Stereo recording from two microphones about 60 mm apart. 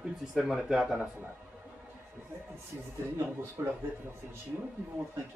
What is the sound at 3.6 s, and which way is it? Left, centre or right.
Speech, right.